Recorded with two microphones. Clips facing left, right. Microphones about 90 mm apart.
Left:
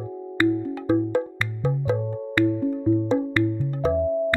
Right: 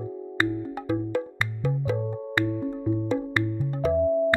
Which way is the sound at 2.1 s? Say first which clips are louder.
Left 5 dB; 20° right (ahead or behind).